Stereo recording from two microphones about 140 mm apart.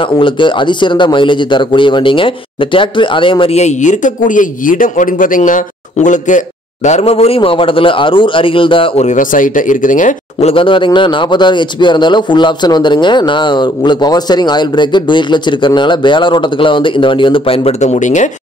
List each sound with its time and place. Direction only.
0.2 s a man's voice: 35° left (ahead or behind)
9.0 s speech: 70° left (ahead or behind)
10.4 s a man's voice: 40° left (ahead or behind); by 18.3 s 60° left (ahead or behind)